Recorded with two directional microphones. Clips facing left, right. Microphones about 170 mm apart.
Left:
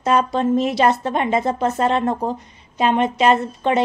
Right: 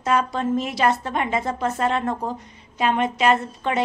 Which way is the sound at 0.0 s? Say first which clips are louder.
Left 4 dB; 25° left (ahead or behind).